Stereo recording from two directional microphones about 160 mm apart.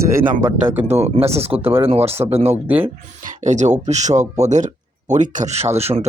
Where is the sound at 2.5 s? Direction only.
10° right (ahead or behind).